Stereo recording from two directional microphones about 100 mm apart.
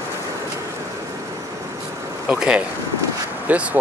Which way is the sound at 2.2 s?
10° right (ahead or behind).